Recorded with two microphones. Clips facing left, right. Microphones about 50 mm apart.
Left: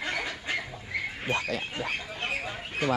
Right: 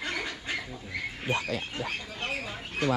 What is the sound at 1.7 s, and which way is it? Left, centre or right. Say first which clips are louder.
Duck: left 2 dB; centre.